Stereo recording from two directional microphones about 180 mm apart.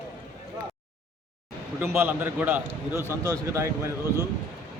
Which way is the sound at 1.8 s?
15° right (ahead or behind).